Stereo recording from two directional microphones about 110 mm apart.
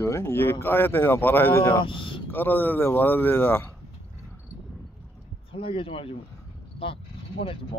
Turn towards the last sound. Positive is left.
turn(degrees=55)  # may be behind; listen again after turning